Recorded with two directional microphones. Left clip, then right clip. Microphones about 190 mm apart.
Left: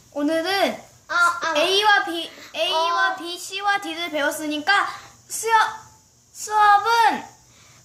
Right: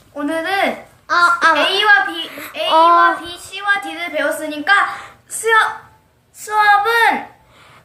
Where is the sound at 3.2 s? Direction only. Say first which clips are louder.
Right 4 dB; 50° left (ahead or behind).